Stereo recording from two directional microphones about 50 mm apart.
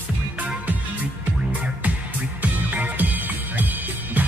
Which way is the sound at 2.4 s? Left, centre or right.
Right.